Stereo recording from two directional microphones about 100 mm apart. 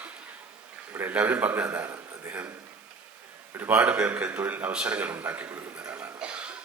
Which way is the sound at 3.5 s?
15° right (ahead or behind).